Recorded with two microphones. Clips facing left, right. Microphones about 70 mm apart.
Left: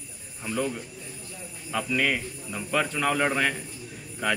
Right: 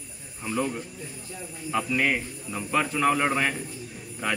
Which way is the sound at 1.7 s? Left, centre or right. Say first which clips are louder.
Right 1 dB; centre.